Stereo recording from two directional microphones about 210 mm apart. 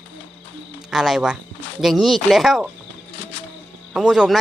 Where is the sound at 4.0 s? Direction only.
5° right (ahead or behind).